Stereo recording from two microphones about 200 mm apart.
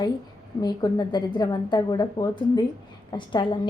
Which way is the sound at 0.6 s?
20° left (ahead or behind).